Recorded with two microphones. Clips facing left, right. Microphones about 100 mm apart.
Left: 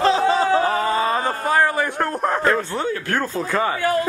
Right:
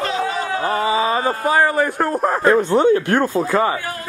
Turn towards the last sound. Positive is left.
turn(degrees=-5)  # may be behind; listen again after turning